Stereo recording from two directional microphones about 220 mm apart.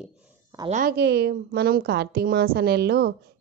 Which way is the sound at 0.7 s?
40° right (ahead or behind).